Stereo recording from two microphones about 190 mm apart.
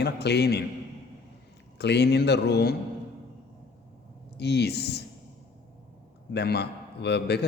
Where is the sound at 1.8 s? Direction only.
60° left (ahead or behind).